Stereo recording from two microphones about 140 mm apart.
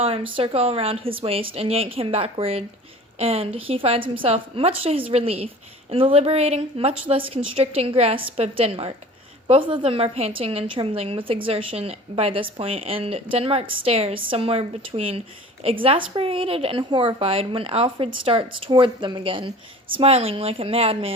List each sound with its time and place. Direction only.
0.0 s a woman's voice: 40° right (ahead or behind)